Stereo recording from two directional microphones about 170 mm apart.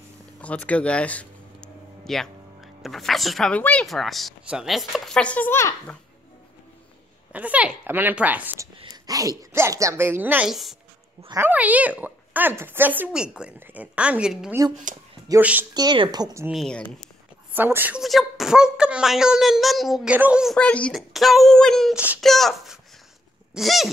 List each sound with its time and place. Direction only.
0.4 s a sound: 10° left (ahead or behind)
2.8 s speech: centre (ahead or behind)
7.3 s a woman's voice: 10° right (ahead or behind)
8.8 s a woman's voice: 20° right (ahead or behind); by 10.8 s centre (ahead or behind)
11.2 s a woman's voice: 15° right (ahead or behind)
14.9 s speech: 50° right (ahead or behind)
15.2 s a woman's voice: 10° right (ahead or behind)
15.7 s speech: 25° right (ahead or behind)
16.4 s speech: centre (ahead or behind)
17.5 s speech: 10° right (ahead or behind)
20.5 s speech: 5° left (ahead or behind)